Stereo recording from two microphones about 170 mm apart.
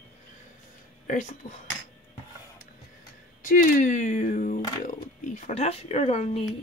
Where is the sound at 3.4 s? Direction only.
50° left (ahead or behind).